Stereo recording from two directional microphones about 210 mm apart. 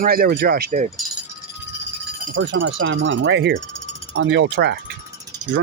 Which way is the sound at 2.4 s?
65° right (ahead or behind).